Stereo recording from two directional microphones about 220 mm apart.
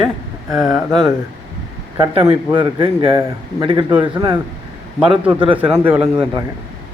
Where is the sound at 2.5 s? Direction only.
20° right (ahead or behind).